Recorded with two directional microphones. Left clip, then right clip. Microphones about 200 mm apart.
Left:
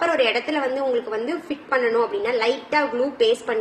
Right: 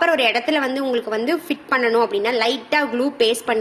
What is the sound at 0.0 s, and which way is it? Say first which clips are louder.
A woman's voice: right 3 dB; 50° right (ahead or behind).